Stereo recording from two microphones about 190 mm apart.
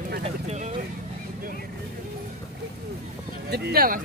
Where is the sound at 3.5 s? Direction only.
55° right (ahead or behind).